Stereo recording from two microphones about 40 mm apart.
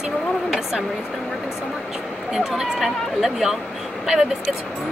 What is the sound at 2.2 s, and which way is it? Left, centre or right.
Speech, centre.